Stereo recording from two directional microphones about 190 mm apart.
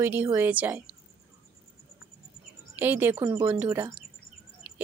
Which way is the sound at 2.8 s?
10° right (ahead or behind).